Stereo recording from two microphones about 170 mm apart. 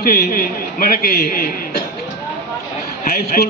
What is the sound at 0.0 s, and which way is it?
A man's voice, 60° left (ahead or behind).